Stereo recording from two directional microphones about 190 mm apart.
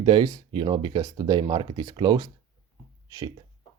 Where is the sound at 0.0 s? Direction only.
25° right (ahead or behind).